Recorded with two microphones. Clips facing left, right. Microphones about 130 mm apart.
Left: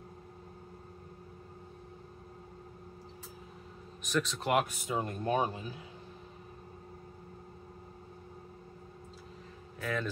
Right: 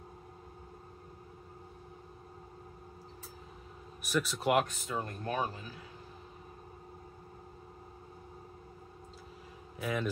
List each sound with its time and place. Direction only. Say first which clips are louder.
4.0 s speech: right 1 dB; 10° right (ahead or behind)
4.6 s speech: left 3 dB; 20° left (ahead or behind)
9.8 s speech: right 1 dB; 15° right (ahead or behind)